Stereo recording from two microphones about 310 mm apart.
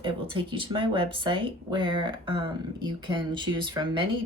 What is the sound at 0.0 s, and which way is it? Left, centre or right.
Speech, centre.